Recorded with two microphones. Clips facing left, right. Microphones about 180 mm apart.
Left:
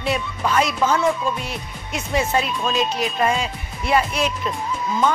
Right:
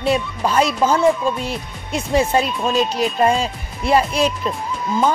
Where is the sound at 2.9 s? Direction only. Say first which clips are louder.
Right 4 dB; 35° right (ahead or behind).